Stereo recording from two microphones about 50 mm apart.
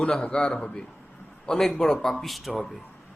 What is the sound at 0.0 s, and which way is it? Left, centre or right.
A man's voice, left.